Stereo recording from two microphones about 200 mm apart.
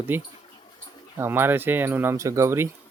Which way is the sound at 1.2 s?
10° right (ahead or behind).